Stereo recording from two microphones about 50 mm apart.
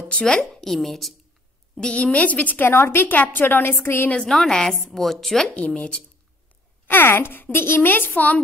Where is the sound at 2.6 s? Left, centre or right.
Left.